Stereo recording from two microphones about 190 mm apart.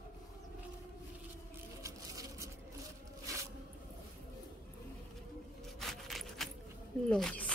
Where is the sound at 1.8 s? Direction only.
15° right (ahead or behind).